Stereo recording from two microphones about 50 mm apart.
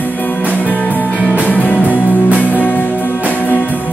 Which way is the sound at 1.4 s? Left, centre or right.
Left.